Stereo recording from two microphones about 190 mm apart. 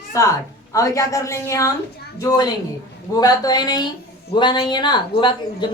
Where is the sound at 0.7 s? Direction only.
15° left (ahead or behind).